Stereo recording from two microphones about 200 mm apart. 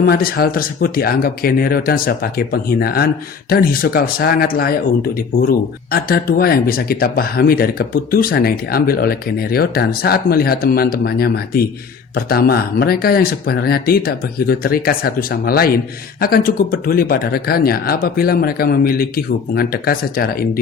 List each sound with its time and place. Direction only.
0.0 s speech: 45° left (ahead or behind)